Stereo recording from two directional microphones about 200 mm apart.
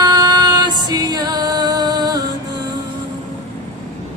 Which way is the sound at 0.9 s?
20° right (ahead or behind).